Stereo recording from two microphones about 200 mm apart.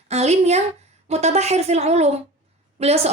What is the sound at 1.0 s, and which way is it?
A woman's voice, 30° right (ahead or behind).